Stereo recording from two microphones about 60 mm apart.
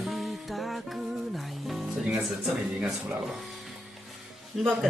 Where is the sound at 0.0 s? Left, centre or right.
Centre.